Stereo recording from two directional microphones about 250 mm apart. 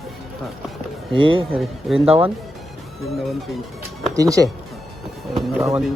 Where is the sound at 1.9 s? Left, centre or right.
Right.